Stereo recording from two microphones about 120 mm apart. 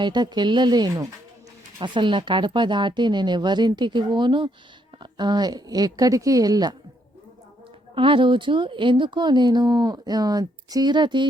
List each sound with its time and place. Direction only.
0.0 s speech: 40° right (ahead or behind)
7.9 s speech: 45° right (ahead or behind)